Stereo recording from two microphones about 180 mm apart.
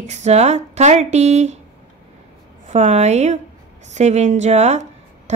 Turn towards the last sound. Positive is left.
turn(degrees=-40)  # may be behind; listen again after turning